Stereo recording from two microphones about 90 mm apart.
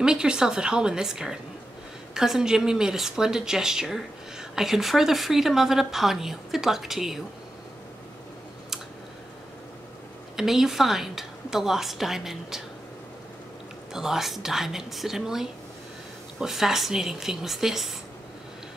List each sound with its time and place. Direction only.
0.0 s a woman's voice: 10° right (ahead or behind)
10.3 s speech: 5° right (ahead or behind)
13.9 s speech: 5° right (ahead or behind)